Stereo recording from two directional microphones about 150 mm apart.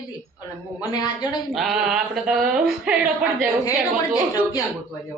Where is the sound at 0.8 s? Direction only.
25° left (ahead or behind).